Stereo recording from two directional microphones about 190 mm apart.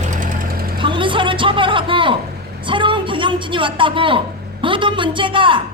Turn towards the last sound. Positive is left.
turn(degrees=-25)  # may be behind; listen again after turning